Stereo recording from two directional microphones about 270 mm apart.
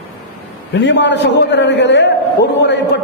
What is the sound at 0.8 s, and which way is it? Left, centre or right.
A man's voice, left.